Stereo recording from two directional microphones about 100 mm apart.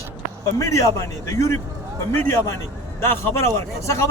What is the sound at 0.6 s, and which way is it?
A man's voice, 30° left (ahead or behind).